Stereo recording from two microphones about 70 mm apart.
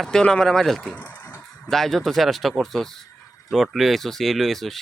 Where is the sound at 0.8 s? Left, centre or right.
Left.